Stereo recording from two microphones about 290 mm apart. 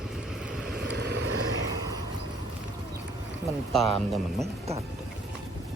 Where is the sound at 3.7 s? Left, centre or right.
Centre.